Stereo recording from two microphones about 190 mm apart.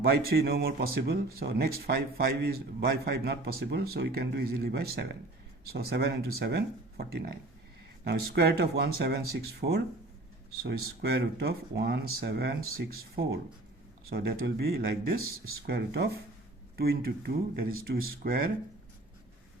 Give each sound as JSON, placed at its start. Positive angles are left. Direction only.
{"t": 0.0, "sound": "speech", "side_deg": -55}